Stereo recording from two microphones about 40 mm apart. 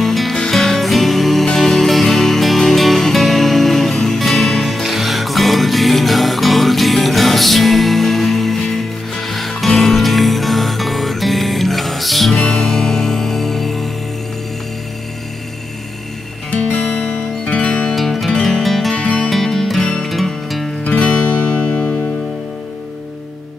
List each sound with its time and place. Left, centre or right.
0.0 s music: centre
16.4 s music: left
17.9 s music: centre
18.9 s music: left
19.2 s music: centre
20.8 s music: left